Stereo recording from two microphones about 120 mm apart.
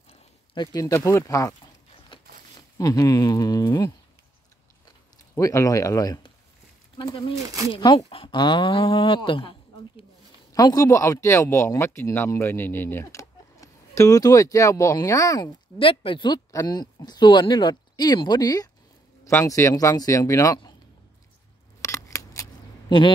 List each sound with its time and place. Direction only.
0.6 s speech: 25° left (ahead or behind)
2.8 s speech: 30° left (ahead or behind)
4.8 s a sound: 30° left (ahead or behind)
7.4 s speech: 30° right (ahead or behind)
7.7 s speech: 40° left (ahead or behind)
10.5 s speech: 30° left (ahead or behind)
15.8 s speech: 50° left (ahead or behind); by 20.7 s 30° left (ahead or behind)
21.8 s scissors: 25° left (ahead or behind)
22.8 s speech: 45° left (ahead or behind)